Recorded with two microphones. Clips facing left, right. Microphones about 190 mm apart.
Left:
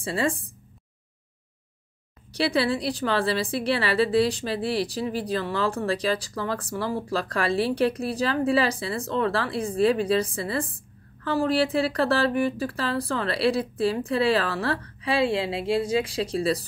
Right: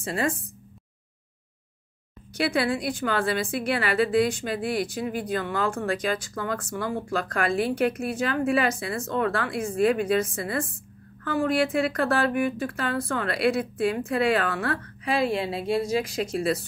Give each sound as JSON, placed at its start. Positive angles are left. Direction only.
{"t": 0.0, "sound": "a woman's voice", "side_deg": 30}
{"t": 2.3, "sound": "a woman's voice", "side_deg": 30}